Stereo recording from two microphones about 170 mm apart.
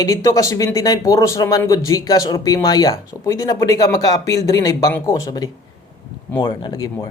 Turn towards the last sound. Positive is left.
turn(degrees=25)  # may be behind; listen again after turning